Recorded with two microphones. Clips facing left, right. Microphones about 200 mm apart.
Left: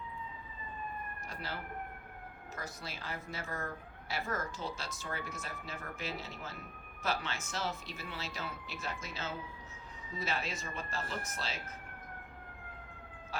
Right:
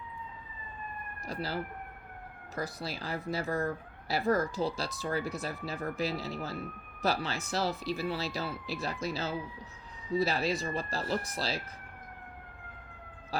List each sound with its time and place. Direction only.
1.3 s speech: 35° right (ahead or behind)
2.6 s speech: 35° right (ahead or behind)